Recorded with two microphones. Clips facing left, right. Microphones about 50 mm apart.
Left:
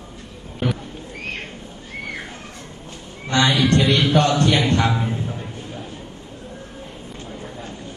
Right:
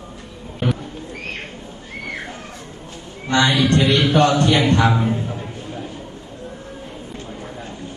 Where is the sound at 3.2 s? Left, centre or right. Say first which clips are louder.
Right 1 dB; right.